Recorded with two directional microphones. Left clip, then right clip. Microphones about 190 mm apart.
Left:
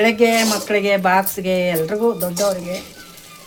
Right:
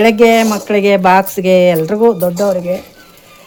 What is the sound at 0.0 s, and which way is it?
Speech, 50° right (ahead or behind).